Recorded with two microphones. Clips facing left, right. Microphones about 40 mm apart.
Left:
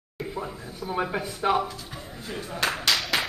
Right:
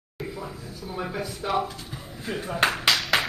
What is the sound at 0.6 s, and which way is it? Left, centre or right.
Speech, left.